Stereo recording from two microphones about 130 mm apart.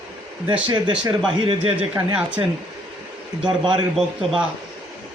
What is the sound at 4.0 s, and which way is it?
Speech, 5° right (ahead or behind).